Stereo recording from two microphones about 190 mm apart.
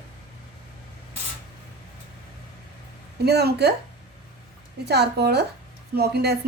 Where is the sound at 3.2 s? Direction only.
60° right (ahead or behind).